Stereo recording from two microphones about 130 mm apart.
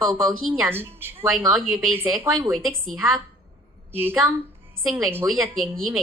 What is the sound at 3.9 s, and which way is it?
Speech, 15° right (ahead or behind).